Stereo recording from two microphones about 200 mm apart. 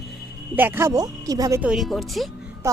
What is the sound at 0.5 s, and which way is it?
Speech, 10° right (ahead or behind).